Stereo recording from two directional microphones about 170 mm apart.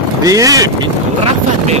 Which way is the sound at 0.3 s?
20° right (ahead or behind).